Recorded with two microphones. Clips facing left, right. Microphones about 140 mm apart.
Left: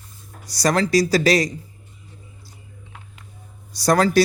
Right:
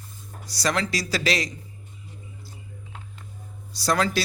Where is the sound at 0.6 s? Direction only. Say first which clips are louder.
Left 8 dB; 40° left (ahead or behind).